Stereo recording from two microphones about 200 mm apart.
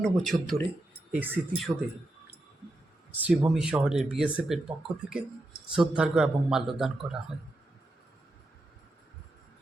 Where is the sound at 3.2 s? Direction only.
5° right (ahead or behind).